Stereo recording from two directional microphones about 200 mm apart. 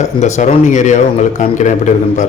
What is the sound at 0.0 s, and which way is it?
A man's voice, 35° left (ahead or behind).